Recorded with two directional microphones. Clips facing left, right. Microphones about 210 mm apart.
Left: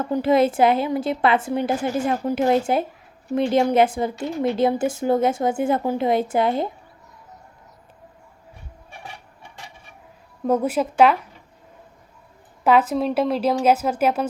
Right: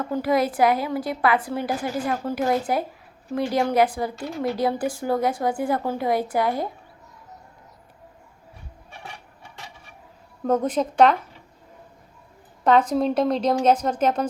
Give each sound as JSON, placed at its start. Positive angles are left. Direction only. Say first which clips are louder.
{"t": 0.1, "sound": "a woman's voice", "louder": "left 5 dB", "side_deg": 25}
{"t": 10.4, "sound": "speech", "louder": "left 1 dB", "side_deg": 10}
{"t": 12.6, "sound": "speech", "louder": "left 1 dB", "side_deg": 5}